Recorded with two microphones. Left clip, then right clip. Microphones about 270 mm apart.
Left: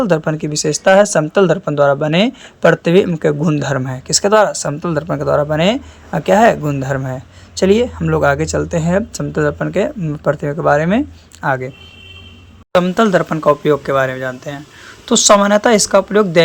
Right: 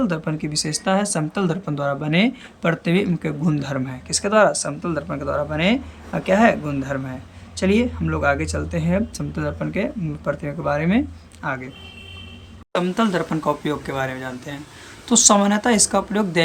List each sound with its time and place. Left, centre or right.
0.0 s speech: centre
12.7 s speech: centre